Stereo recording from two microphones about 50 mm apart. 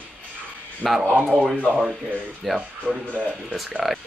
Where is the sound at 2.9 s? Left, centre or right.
Right.